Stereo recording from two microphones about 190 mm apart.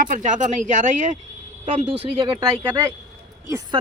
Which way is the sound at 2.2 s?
25° right (ahead or behind).